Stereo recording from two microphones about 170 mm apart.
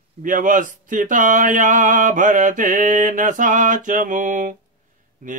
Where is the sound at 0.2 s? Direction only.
50° right (ahead or behind).